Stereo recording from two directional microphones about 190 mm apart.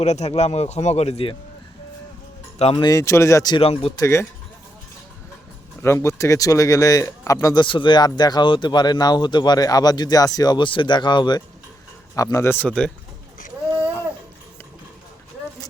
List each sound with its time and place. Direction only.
0.0 s speech: 35° left (ahead or behind)
2.6 s speech: 30° left (ahead or behind)
4.0 s speech: 15° left (ahead or behind)
5.8 s speech: 15° left (ahead or behind)